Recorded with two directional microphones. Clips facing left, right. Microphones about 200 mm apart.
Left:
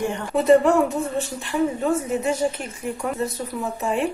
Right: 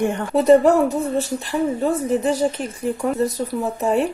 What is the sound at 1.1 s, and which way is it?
Speech, 35° right (ahead or behind).